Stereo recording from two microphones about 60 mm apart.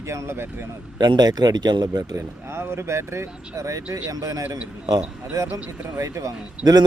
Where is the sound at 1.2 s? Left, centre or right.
Right.